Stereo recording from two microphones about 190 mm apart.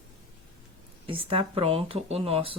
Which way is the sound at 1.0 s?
30° right (ahead or behind).